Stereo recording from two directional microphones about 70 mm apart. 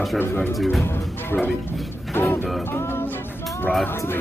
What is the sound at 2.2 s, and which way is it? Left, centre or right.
Music, left.